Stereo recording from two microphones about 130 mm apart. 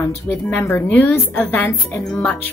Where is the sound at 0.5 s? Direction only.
15° left (ahead or behind).